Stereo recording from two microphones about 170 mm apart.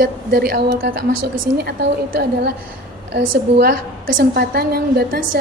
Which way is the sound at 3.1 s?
60° right (ahead or behind).